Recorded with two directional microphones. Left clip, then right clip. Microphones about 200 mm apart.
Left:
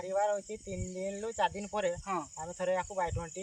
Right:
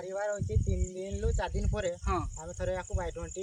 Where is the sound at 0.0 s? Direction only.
5° left (ahead or behind).